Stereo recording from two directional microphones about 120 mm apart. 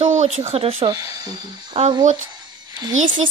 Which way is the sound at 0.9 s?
35° right (ahead or behind).